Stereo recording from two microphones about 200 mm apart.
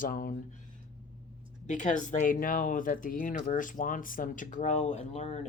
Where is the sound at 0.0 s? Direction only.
45° left (ahead or behind).